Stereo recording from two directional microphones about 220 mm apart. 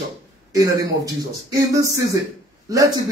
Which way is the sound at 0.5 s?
15° right (ahead or behind).